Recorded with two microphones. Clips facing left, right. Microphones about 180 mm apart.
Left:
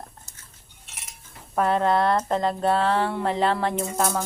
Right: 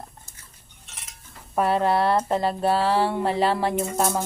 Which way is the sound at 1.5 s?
10° right (ahead or behind).